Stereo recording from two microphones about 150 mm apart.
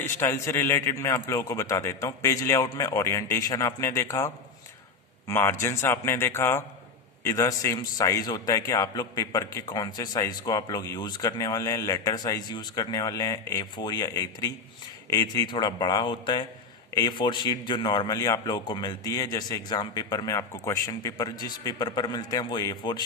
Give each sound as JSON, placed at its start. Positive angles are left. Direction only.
{"t": 0.0, "sound": "a man's voice", "side_deg": 15}
{"t": 5.3, "sound": "a man's voice", "side_deg": 15}